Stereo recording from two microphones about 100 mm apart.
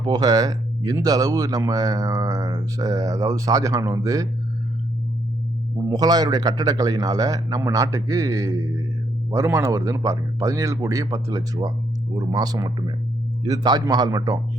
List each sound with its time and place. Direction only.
0.0 s speech: 40° right (ahead or behind)
5.9 s speech: 40° right (ahead or behind)